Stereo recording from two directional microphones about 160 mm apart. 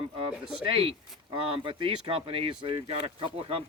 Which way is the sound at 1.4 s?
30° right (ahead or behind).